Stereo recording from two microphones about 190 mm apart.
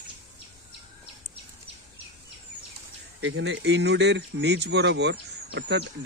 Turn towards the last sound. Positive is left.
turn(degrees=-65)  # may be behind; listen again after turning